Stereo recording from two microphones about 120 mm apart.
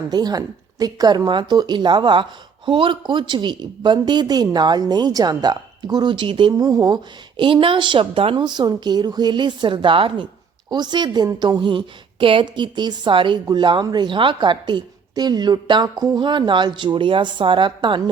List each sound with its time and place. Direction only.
0.1 s a man's voice: 35° right (ahead or behind)